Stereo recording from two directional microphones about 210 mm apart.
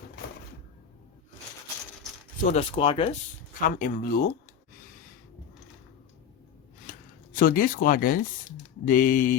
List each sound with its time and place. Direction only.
2.4 s speech: 30° left (ahead or behind)
3.8 s speech: 40° left (ahead or behind)
7.3 s speech: 40° left (ahead or behind)